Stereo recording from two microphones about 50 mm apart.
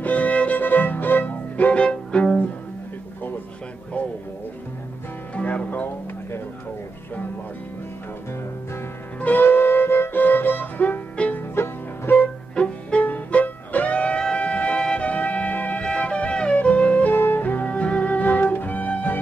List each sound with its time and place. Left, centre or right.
0.0 s music: left
0.6 s violin: left
5.3 s music: left
9.2 s music: left
11.2 s music: left
11.5 s music: left
12.5 s music: left
13.0 s music: left